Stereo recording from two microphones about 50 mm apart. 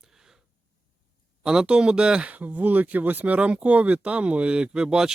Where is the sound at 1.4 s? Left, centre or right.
Centre.